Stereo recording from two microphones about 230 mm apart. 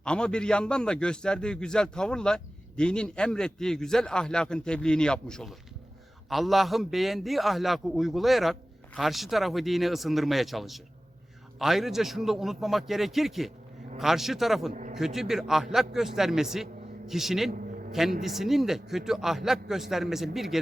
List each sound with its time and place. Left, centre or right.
0.0 s a man's voice: centre
14.7 s a man's voice: right
14.9 s a man's voice: centre